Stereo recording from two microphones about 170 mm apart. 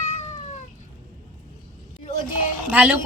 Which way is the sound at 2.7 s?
10° right (ahead or behind).